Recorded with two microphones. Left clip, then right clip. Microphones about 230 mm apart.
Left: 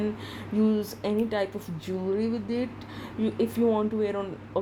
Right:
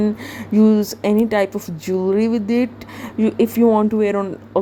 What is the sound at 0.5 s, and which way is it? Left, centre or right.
Speech, right.